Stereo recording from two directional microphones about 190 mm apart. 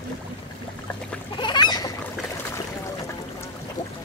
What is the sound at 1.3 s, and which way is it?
Goose, 25° left (ahead or behind).